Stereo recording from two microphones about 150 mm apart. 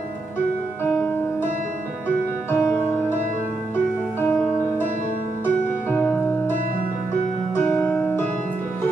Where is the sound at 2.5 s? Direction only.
15° left (ahead or behind).